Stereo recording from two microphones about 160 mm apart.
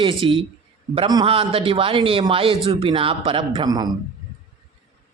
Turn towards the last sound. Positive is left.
turn(degrees=-25)  # may be behind; listen again after turning